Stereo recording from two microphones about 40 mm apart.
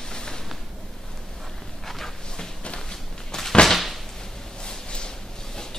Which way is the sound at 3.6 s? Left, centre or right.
Centre.